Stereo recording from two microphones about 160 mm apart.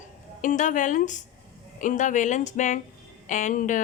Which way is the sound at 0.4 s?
55° left (ahead or behind).